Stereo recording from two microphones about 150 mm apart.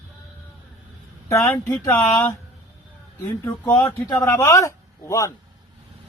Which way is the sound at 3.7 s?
25° left (ahead or behind).